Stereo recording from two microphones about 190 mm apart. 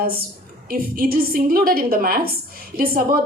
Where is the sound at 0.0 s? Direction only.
50° right (ahead or behind).